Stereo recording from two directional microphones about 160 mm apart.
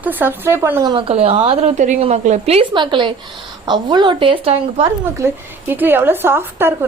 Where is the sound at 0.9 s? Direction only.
35° right (ahead or behind).